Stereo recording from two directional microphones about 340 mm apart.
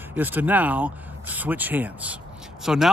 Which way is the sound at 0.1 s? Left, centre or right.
Centre.